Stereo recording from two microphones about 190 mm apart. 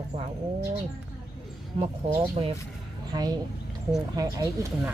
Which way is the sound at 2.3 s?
30° right (ahead or behind).